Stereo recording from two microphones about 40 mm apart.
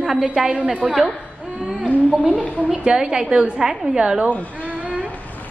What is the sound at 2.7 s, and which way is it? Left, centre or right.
Speech, right.